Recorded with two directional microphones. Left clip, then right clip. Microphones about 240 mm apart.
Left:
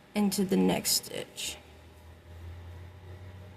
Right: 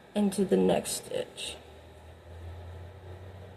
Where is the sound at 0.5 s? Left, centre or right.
Left.